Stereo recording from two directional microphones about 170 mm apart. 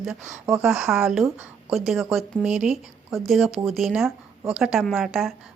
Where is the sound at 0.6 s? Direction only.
Centre (ahead or behind).